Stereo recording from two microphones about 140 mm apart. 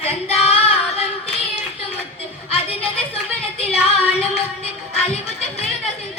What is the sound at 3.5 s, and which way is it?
Music, 45° left (ahead or behind).